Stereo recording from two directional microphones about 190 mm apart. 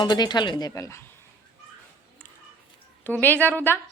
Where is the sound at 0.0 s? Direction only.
20° left (ahead or behind).